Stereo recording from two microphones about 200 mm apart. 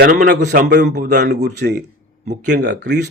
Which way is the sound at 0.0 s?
45° right (ahead or behind).